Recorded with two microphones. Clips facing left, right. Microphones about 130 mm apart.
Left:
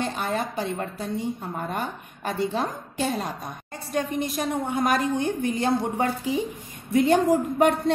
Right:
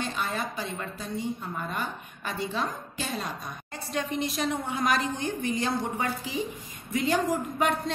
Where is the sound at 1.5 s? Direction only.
45° left (ahead or behind).